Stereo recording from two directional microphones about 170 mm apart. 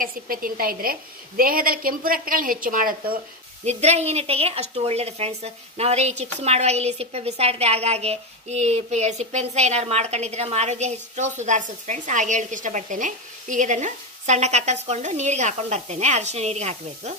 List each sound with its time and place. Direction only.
0.0 s a woman's voice: 55° right (ahead or behind)
3.6 s a woman's voice: 40° right (ahead or behind)